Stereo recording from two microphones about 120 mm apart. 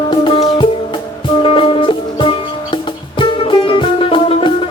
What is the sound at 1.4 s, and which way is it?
Music, 45° left (ahead or behind).